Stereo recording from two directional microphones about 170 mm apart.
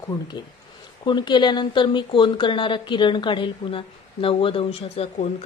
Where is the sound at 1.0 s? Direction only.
25° left (ahead or behind).